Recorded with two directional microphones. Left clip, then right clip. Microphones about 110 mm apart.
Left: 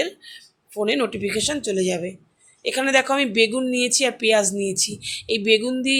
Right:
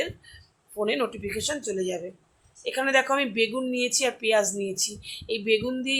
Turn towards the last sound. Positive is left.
turn(degrees=45)  # may be behind; listen again after turning